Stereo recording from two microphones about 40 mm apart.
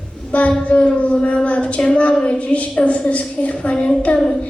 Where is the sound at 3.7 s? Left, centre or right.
Left.